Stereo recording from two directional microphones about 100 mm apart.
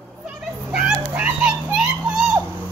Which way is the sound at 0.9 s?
15° right (ahead or behind).